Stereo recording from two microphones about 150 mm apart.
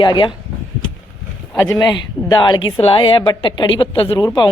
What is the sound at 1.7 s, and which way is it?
A woman's voice, 25° left (ahead or behind).